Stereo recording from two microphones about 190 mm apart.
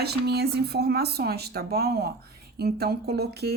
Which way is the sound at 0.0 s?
60° right (ahead or behind).